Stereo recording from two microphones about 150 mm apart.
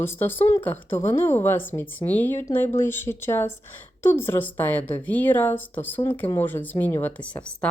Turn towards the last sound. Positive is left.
turn(degrees=10)  # may be behind; listen again after turning